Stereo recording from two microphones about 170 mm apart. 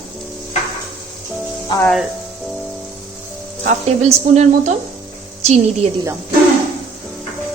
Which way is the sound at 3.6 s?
40° right (ahead or behind).